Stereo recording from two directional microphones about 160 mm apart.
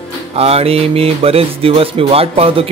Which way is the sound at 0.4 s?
40° right (ahead or behind).